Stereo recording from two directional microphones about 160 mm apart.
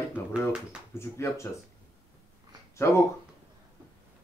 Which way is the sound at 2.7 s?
15° left (ahead or behind).